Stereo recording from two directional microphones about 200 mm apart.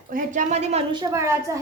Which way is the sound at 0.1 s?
40° right (ahead or behind).